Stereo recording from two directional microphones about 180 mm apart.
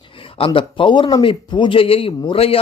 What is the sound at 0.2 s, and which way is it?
Speech, 30° left (ahead or behind).